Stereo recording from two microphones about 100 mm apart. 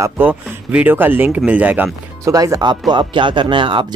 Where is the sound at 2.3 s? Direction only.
35° right (ahead or behind); by 3.8 s 60° right (ahead or behind).